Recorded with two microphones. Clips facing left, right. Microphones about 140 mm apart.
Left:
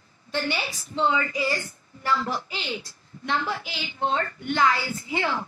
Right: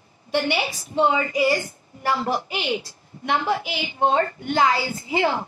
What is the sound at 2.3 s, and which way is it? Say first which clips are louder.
Speech: right 6 dB; 65° right (ahead or behind).